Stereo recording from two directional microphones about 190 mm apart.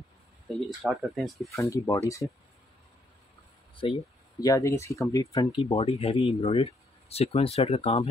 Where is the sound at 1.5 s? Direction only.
15° left (ahead or behind).